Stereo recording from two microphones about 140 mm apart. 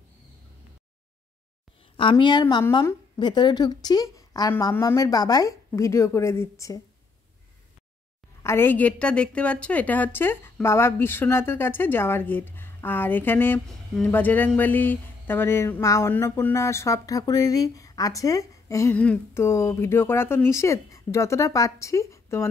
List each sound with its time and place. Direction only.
2.0 s a woman's voice: 35° left (ahead or behind)
8.4 s a woman's voice: 20° left (ahead or behind)
13.7 s speech: centre (ahead or behind)
14.1 s speech: 15° left (ahead or behind)